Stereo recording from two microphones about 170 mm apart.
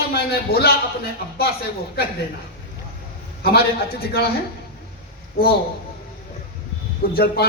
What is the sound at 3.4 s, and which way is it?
Speech, 65° left (ahead or behind).